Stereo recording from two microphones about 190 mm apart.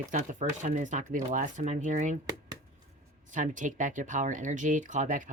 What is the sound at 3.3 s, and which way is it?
Speech, 40° right (ahead or behind).